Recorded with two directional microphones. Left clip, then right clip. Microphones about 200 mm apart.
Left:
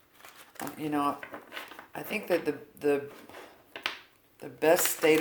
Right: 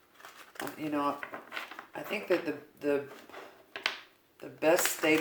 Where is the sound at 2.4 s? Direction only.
50° left (ahead or behind).